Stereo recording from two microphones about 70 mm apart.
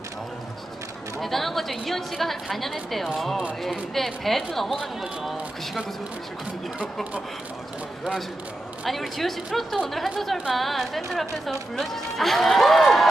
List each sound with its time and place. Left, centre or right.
1.2 s a woman's voice: centre
8.8 s a woman's voice: centre